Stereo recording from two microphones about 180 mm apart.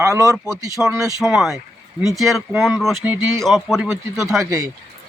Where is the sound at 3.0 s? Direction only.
10° right (ahead or behind).